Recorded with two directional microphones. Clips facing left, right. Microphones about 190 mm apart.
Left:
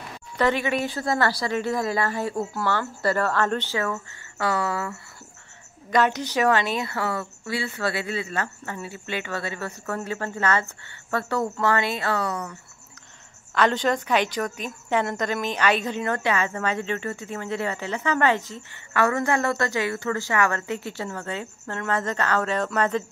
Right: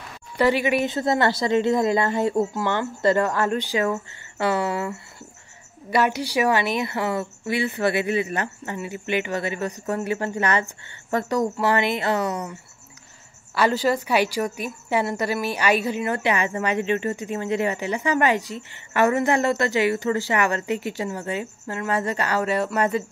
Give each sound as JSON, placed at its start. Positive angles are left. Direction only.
{"t": 0.4, "sound": "speech", "side_deg": -10}
{"t": 5.9, "sound": "a woman's voice", "side_deg": -10}
{"t": 13.6, "sound": "a woman's voice", "side_deg": -5}